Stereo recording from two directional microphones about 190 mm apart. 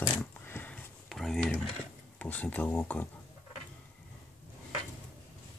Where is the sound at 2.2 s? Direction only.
10° left (ahead or behind).